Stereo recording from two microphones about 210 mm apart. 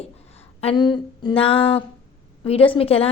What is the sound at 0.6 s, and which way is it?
A woman's voice, 25° left (ahead or behind).